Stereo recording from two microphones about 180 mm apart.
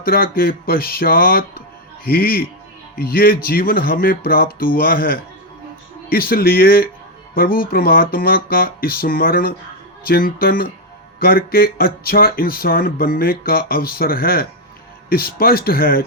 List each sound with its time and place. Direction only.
0.0 s speech: 55° left (ahead or behind)